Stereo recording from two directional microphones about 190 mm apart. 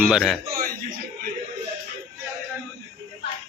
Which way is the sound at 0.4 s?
50° right (ahead or behind).